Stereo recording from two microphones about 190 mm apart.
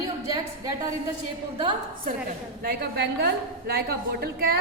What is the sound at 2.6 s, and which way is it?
A woman's voice, 55° right (ahead or behind).